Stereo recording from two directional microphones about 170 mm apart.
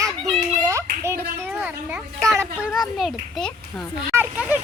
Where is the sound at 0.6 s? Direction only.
15° right (ahead or behind).